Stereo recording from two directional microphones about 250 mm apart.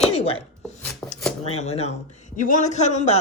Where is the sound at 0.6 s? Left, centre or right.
Centre.